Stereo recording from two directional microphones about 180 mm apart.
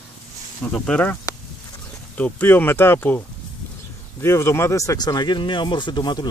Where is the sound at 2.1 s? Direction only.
10° left (ahead or behind).